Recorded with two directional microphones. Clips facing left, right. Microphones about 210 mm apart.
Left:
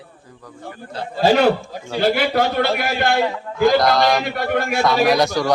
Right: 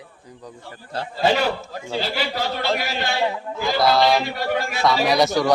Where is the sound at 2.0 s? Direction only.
55° left (ahead or behind).